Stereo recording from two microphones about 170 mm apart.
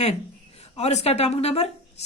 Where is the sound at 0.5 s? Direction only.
40° left (ahead or behind).